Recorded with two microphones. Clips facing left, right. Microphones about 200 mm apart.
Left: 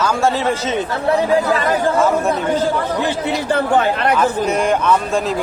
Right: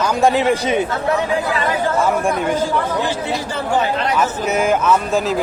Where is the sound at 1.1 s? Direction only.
40° left (ahead or behind).